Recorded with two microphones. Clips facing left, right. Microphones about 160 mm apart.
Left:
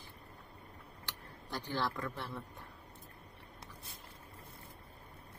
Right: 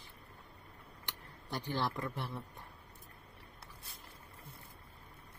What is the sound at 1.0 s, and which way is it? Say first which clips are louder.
Speech: even; 15° right (ahead or behind).